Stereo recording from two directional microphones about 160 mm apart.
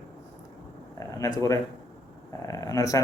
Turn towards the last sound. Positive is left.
turn(degrees=20)  # may be behind; listen again after turning